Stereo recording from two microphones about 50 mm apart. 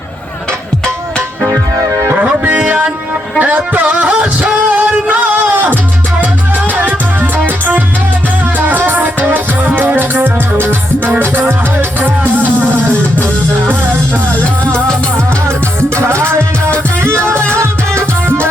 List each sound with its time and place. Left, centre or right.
2.4 s music: right
4.0 s music: centre
4.7 s music: right
6.7 s music: right
14.6 s music: left
16.0 s music: right
17.2 s music: left
17.5 s music: right